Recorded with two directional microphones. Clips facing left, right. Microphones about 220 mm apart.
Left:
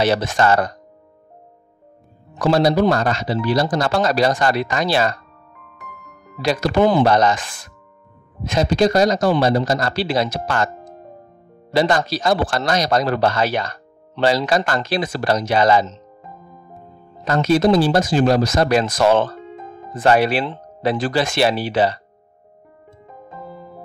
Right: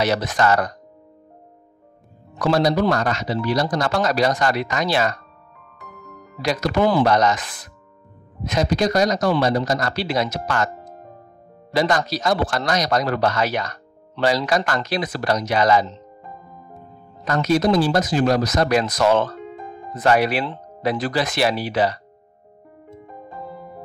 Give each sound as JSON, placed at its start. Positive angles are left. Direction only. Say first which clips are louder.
{"t": 0.0, "sound": "speech", "louder": "left 2 dB", "side_deg": 30}
{"t": 2.3, "sound": "speech", "louder": "left 3 dB", "side_deg": 25}
{"t": 6.4, "sound": "speech", "louder": "left 3 dB", "side_deg": 30}
{"t": 11.7, "sound": "speech", "louder": "left 2 dB", "side_deg": 30}
{"t": 17.2, "sound": "speech", "louder": "left 3 dB", "side_deg": 30}